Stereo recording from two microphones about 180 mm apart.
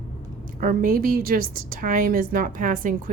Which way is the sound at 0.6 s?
50° right (ahead or behind).